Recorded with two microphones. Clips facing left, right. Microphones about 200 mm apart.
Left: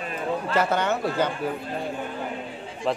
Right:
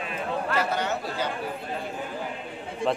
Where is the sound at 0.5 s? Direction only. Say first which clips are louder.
Left 6 dB; 55° left (ahead or behind).